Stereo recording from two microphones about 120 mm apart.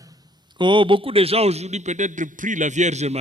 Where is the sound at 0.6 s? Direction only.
40° right (ahead or behind); by 3.1 s 70° right (ahead or behind).